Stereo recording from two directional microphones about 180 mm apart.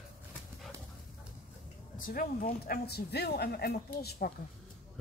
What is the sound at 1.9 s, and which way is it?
Speech, 50° left (ahead or behind).